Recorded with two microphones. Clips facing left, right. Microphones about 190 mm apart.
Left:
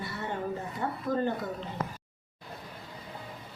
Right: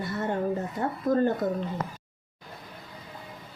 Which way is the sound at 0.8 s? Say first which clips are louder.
Right 2 dB; 45° right (ahead or behind).